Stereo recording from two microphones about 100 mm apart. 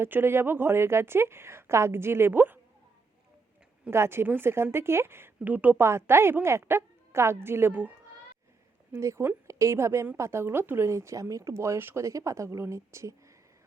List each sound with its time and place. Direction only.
0.0 s speech: 25° right (ahead or behind)
3.8 s speech: 25° right (ahead or behind)
8.9 s speech: 30° right (ahead or behind)